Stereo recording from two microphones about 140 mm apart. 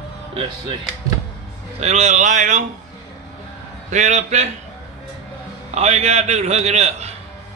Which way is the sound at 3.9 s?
55° right (ahead or behind).